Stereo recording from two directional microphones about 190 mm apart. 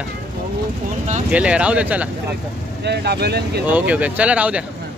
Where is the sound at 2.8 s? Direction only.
60° right (ahead or behind).